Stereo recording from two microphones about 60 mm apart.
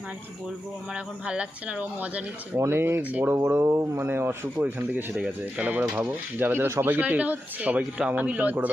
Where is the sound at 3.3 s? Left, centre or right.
Right.